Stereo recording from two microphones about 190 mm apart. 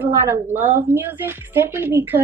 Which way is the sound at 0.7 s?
10° right (ahead or behind).